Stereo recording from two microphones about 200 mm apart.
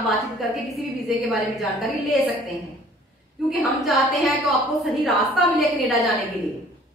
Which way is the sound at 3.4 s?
Centre (ahead or behind).